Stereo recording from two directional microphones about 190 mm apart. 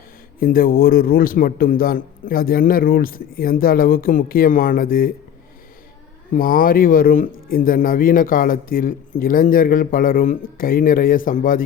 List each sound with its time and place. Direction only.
0.3 s speech: 50° left (ahead or behind)
6.3 s speech: 45° left (ahead or behind)